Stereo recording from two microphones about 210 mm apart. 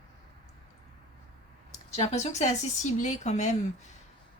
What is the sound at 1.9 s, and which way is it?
Speech, 30° left (ahead or behind).